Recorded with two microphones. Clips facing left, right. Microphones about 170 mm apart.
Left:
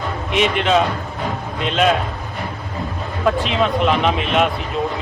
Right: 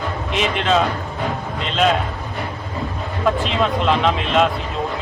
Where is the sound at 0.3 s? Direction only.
5° left (ahead or behind).